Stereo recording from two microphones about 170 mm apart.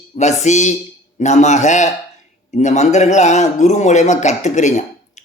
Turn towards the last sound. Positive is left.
turn(degrees=45)  # may be behind; listen again after turning